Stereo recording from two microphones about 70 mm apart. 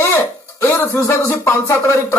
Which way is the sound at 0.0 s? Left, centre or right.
Left.